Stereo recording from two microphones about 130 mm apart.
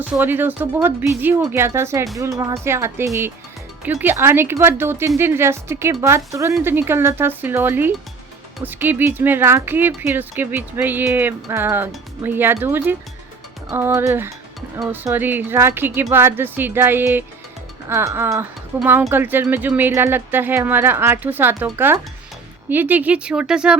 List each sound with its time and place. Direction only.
0.0 s a woman's voice: 15° right (ahead or behind)
22.7 s speech: 15° right (ahead or behind)